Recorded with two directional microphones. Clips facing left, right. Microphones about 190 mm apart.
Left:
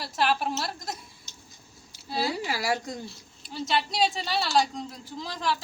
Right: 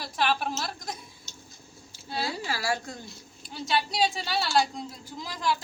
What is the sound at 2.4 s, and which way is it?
Speech, 20° left (ahead or behind).